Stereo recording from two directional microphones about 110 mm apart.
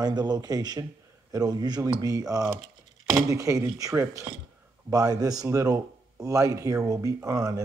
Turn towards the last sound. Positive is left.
turn(degrees=-30)  # may be behind; listen again after turning